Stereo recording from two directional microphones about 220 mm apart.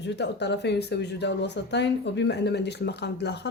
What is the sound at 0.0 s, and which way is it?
Speech, 50° left (ahead or behind).